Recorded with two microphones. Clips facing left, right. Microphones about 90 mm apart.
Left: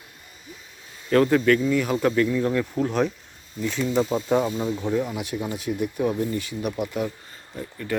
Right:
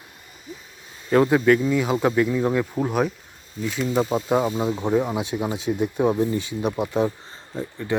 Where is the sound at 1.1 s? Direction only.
15° right (ahead or behind).